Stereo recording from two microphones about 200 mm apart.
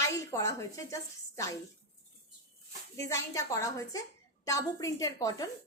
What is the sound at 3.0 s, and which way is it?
A woman's voice, 15° left (ahead or behind).